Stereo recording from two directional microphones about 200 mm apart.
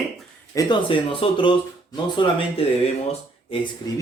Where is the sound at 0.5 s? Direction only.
25° left (ahead or behind).